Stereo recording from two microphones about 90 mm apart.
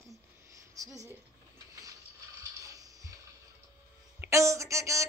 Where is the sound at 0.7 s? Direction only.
40° right (ahead or behind).